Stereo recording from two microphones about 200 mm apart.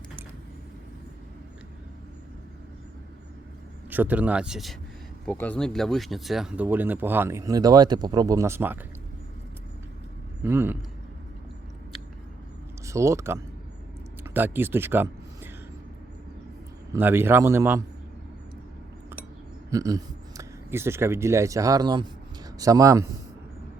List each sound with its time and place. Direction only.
3.8 s speech: 10° right (ahead or behind)
10.4 s speech: 10° right (ahead or behind)
12.8 s speech: 15° right (ahead or behind)
16.9 s speech: 10° right (ahead or behind)
19.7 s speech: 15° right (ahead or behind)